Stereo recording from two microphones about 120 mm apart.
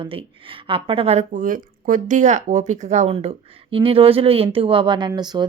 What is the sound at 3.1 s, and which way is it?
A woman's voice, 55° right (ahead or behind).